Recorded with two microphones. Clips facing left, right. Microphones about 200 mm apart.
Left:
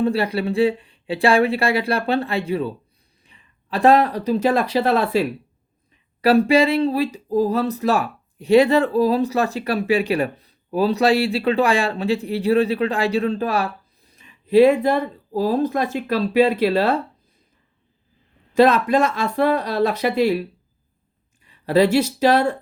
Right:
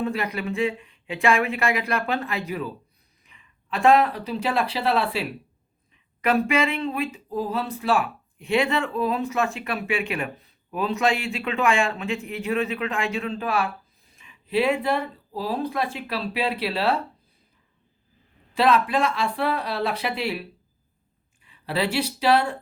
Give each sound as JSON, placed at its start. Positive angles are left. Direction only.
{"t": 0.0, "sound": "speech", "side_deg": 30}
{"t": 6.2, "sound": "speech", "side_deg": 35}
{"t": 18.5, "sound": "speech", "side_deg": 45}
{"t": 21.4, "sound": "speech", "side_deg": 40}